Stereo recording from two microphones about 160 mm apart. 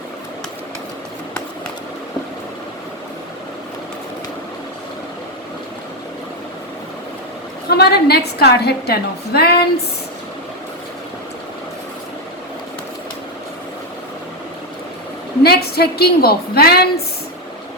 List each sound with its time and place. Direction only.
7.7 s a woman's voice: 85° left
15.4 s a woman's voice: 80° left